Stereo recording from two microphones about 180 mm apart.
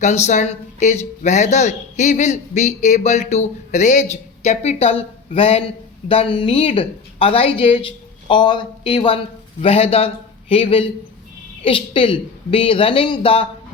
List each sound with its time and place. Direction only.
0.0 s speech: 40° left (ahead or behind)